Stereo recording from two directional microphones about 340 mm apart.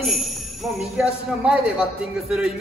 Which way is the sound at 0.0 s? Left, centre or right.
Centre.